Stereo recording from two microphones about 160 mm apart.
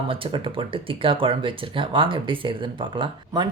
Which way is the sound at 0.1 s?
35° right (ahead or behind).